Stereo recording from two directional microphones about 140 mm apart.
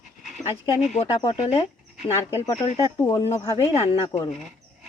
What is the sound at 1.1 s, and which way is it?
Speech, 35° left (ahead or behind).